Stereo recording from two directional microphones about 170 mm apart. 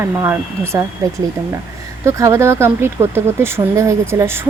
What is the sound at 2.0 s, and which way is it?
Speech, 15° right (ahead or behind).